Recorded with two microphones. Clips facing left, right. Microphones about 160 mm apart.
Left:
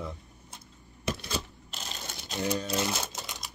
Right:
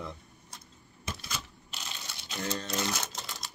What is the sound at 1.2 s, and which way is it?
Shuffling cards, 40° left (ahead or behind).